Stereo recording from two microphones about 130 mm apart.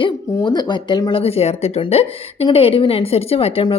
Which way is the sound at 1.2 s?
50° left (ahead or behind).